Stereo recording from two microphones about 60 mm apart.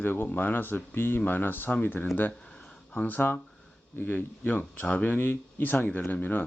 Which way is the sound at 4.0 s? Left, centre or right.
Left.